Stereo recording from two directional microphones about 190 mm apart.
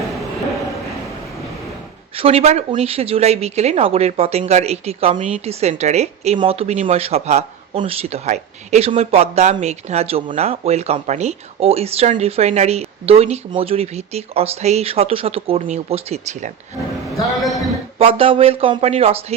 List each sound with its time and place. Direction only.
2.1 s speech: 30° right (ahead or behind)
18.0 s speech: 30° right (ahead or behind)